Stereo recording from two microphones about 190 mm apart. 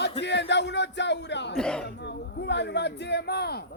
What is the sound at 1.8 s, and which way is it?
A man's voice, 65° left (ahead or behind).